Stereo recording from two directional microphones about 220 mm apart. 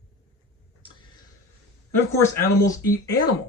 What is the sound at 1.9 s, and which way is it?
Speech, 15° left (ahead or behind).